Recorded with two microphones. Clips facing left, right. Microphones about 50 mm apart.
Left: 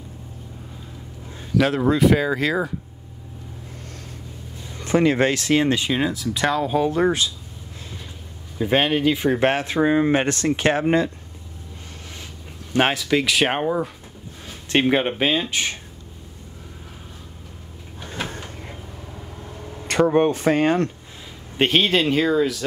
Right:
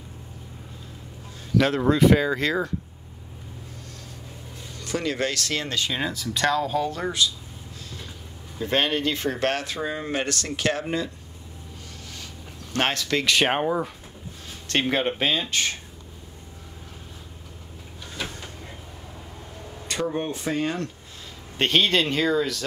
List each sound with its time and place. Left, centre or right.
1.5 s speech: centre
4.7 s speech: left
6.0 s speech: centre; by 7.2 s left
8.5 s speech: centre
12.7 s speech: centre
14.5 s speech: centre
18.0 s a sound: left
19.9 s speech: left
21.5 s speech: centre